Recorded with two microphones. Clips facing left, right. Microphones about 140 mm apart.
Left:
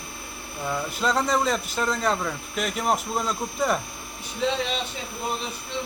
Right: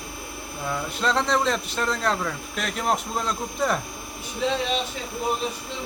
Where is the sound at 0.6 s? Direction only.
Centre (ahead or behind).